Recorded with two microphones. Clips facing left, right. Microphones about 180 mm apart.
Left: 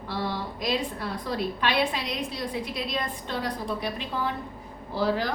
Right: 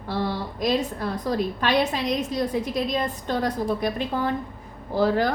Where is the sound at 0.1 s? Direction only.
45° right (ahead or behind).